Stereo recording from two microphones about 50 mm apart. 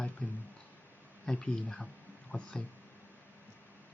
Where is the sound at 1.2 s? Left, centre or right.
Left.